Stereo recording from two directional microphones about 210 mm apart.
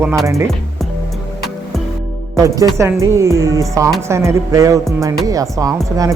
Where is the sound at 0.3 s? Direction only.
15° right (ahead or behind).